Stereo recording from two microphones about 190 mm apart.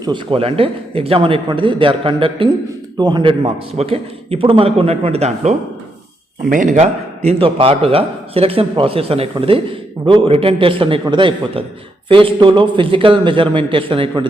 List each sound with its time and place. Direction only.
0.0 s a man's voice: 25° right (ahead or behind)